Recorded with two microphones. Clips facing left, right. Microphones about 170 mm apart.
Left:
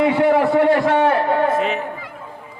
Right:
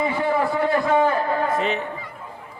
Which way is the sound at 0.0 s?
70° left (ahead or behind).